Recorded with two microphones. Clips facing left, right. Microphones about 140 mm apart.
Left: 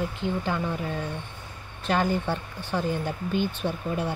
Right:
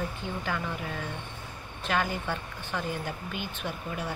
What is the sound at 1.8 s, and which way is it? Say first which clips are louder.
Speech: left 5 dB; 30° left (ahead or behind).